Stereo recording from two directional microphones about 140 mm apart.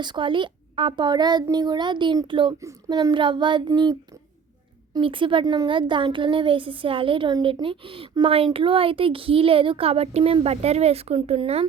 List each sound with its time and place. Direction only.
0.0 s speech: 35° right (ahead or behind)
2.6 s speech: 25° right (ahead or behind)
4.9 s speech: 35° right (ahead or behind)